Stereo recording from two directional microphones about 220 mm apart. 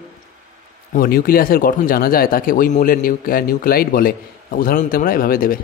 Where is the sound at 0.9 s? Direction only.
40° left (ahead or behind).